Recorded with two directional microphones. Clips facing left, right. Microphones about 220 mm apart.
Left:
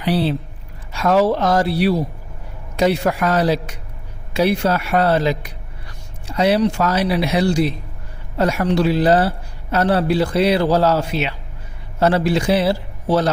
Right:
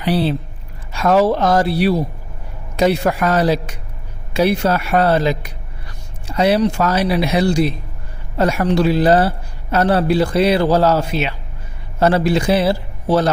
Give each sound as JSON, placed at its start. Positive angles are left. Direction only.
{"t": 0.0, "sound": "a man's voice", "side_deg": -50}